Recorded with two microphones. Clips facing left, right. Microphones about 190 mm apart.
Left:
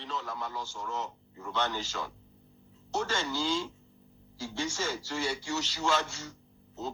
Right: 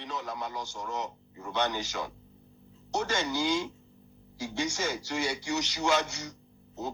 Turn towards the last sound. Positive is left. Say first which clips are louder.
# right 1 dB
turn(degrees=-15)  # may be behind; listen again after turning